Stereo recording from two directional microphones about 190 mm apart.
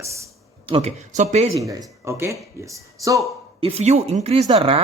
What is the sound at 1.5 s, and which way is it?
Speech, 20° right (ahead or behind).